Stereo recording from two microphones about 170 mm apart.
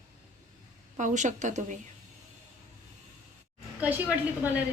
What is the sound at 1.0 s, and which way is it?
Speech, 45° right (ahead or behind).